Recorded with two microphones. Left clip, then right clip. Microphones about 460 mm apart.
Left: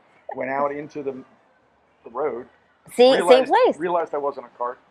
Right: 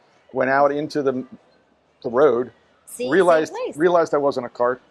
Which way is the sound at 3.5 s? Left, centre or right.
Left.